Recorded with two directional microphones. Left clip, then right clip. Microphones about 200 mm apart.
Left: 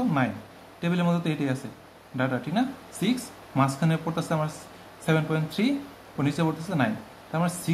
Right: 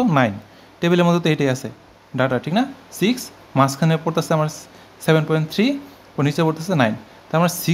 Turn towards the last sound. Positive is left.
turn(degrees=-45)  # may be behind; listen again after turning